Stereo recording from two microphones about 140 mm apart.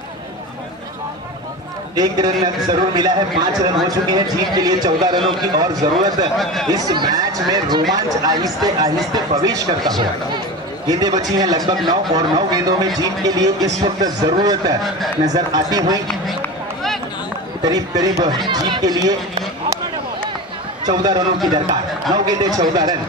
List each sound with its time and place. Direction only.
2.0 s a man's voice: 30° right (ahead or behind)
6.3 s speech: centre (ahead or behind)
6.7 s a man's voice: 30° right (ahead or behind)
17.6 s a man's voice: 25° right (ahead or behind)
20.8 s a man's voice: 30° right (ahead or behind)